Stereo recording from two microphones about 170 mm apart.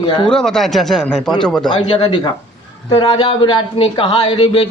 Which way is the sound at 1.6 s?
30° left (ahead or behind).